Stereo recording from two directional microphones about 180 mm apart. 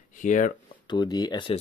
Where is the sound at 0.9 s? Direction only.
25° left (ahead or behind).